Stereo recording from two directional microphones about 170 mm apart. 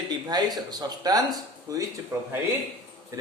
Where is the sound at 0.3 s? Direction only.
25° right (ahead or behind).